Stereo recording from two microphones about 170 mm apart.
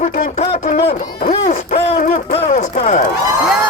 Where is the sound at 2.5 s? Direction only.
45° left (ahead or behind).